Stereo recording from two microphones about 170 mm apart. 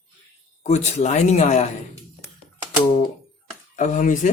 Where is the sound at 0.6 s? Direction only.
40° left (ahead or behind).